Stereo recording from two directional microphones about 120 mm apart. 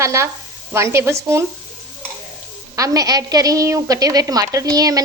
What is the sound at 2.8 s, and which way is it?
A woman's voice, 30° right (ahead or behind).